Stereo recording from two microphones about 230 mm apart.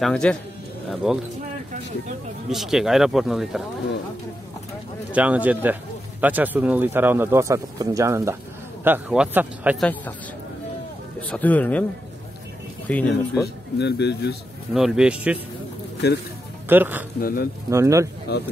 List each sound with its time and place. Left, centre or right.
0.0 s speech: centre
2.5 s speech: centre
5.1 s speech: centre
11.1 s speech: centre
12.8 s speech: centre
13.7 s a man's voice: left
14.7 s speech: centre
16.6 s speech: centre
17.2 s speech: left
17.6 s speech: centre
18.3 s a man's voice: left